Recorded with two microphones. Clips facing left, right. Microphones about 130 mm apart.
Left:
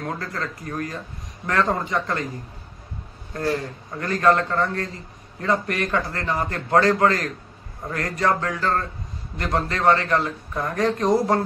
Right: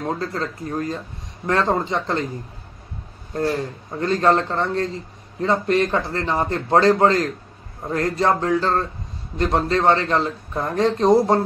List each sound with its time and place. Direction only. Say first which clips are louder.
0.0 s a man's voice: right 4 dB; 25° right (ahead or behind)
4.0 s a man's voice: right 1 dB; 25° right (ahead or behind)